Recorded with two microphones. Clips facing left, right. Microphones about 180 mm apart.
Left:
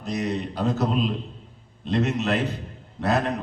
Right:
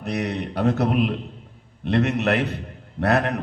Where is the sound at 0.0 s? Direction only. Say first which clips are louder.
Right 1 dB; 65° right (ahead or behind).